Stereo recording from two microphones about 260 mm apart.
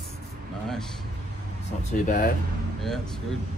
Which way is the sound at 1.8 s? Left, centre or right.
Left.